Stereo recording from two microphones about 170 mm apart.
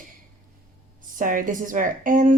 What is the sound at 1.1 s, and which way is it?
Speech, 50° right (ahead or behind).